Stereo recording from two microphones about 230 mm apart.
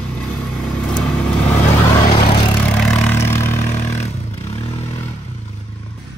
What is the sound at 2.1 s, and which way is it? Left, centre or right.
Vehicle, left.